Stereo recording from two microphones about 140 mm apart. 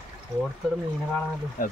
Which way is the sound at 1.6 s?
80° left.